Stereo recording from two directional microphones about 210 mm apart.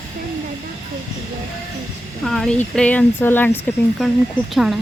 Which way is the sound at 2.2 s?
Centre (ahead or behind).